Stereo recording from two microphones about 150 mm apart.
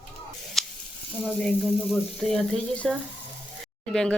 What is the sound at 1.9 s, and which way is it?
Speech, 5° left (ahead or behind).